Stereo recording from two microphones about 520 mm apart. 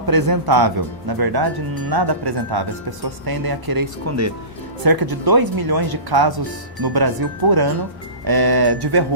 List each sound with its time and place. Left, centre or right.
0.0 s speech: right